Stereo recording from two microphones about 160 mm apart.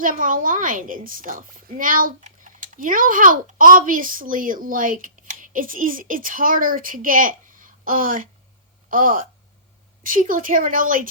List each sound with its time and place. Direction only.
0.0 s a woman's voice: 55° right (ahead or behind)